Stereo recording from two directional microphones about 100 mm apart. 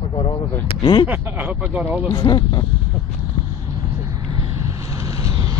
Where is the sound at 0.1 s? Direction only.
50° left (ahead or behind).